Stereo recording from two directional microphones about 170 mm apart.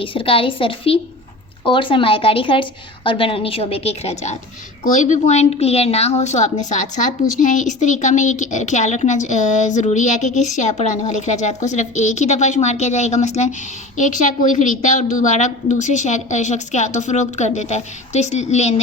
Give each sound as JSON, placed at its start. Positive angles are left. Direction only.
{"t": 0.0, "sound": "a woman's voice", "side_deg": 30}